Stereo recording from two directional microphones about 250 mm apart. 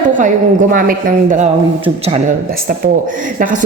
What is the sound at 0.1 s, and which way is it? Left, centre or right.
A woman's voice, right.